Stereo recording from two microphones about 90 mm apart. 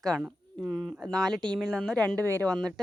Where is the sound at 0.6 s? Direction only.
40° right (ahead or behind).